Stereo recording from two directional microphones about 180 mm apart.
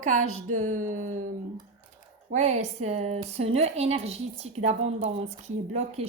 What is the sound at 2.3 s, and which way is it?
A woman's voice, 40° right (ahead or behind).